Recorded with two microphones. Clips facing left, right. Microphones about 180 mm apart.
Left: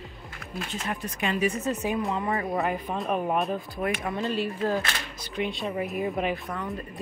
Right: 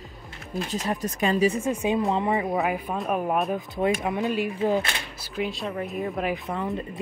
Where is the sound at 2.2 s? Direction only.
20° right (ahead or behind).